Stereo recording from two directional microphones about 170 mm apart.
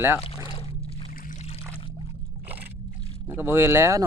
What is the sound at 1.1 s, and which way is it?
Boat, 45° left (ahead or behind).